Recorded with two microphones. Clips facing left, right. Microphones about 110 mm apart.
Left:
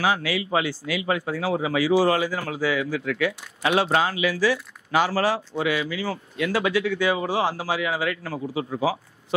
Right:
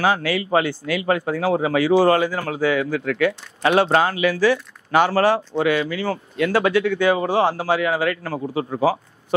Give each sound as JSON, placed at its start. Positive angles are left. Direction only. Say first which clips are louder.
{"t": 0.0, "sound": "speech", "louder": "right 4 dB", "side_deg": -50}